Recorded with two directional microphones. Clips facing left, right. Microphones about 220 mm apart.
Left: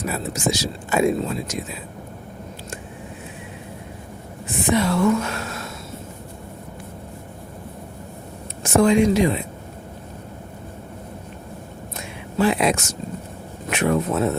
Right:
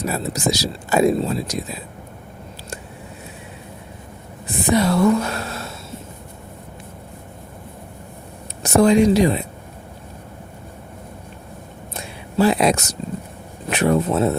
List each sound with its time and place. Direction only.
0.0 s speech: 40° right (ahead or behind)
4.4 s speech: 40° right (ahead or behind)
8.6 s speech: 35° right (ahead or behind)
11.9 s a sound: 35° right (ahead or behind)
13.7 s speech: 35° right (ahead or behind)